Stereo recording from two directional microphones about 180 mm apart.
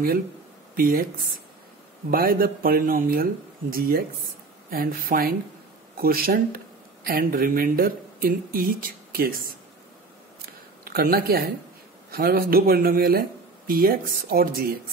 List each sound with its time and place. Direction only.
0.7 s speech: 55° right (ahead or behind)
2.0 s speech: 55° right (ahead or behind)
10.8 s speech: 55° right (ahead or behind)